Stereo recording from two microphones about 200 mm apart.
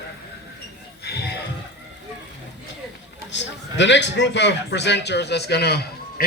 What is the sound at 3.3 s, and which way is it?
A man's voice, 60° left (ahead or behind).